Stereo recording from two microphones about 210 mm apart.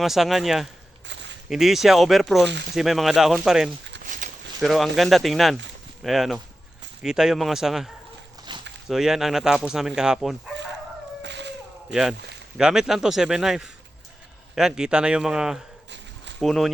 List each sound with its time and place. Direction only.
0.0 s speech: centre (ahead or behind)
1.0 s a sound: 60° right (ahead or behind)
1.5 s speech: centre (ahead or behind)
4.0 s a sound: 40° right (ahead or behind)
4.6 s speech: centre (ahead or behind)
8.5 s a sound: 20° right (ahead or behind)
8.9 s speech: centre (ahead or behind)
11.2 s howl: 55° right (ahead or behind)
11.9 s speech: 5° right (ahead or behind)